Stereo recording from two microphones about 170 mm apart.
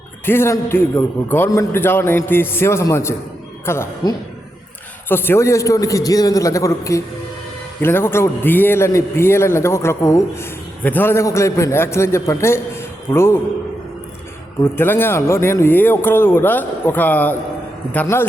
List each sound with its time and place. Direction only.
0.3 s a man's voice: 15° left (ahead or behind)
14.6 s a man's voice: 15° left (ahead or behind)